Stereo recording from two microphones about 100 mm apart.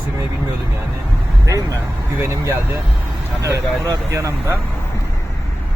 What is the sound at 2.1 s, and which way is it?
Speech, 25° right (ahead or behind).